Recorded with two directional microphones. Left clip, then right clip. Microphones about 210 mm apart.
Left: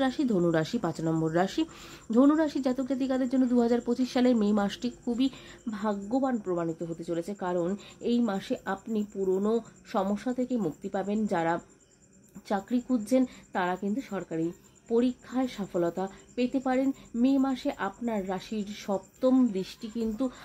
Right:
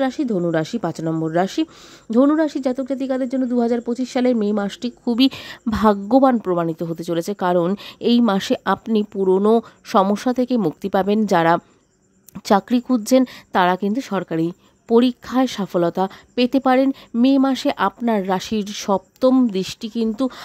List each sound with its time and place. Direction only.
0.0 s a woman's voice: 30° right (ahead or behind)
5.1 s speech: 50° right (ahead or behind)